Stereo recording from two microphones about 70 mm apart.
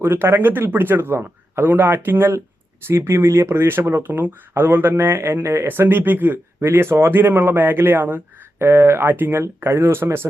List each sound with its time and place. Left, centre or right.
0.0 s speech: right